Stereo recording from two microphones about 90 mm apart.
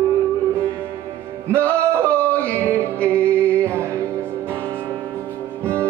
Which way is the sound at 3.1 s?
15° left (ahead or behind).